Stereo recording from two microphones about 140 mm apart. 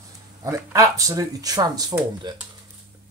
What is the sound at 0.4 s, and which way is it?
Speech, 20° right (ahead or behind).